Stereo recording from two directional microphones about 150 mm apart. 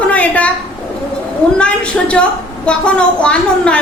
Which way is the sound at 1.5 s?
5° left (ahead or behind).